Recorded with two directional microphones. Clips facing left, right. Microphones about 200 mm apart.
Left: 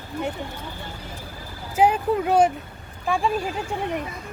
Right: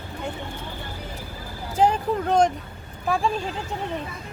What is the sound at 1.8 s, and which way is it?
Speech, 10° left (ahead or behind).